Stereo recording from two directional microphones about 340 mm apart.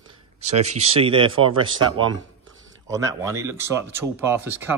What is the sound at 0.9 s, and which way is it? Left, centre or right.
A man's voice, centre.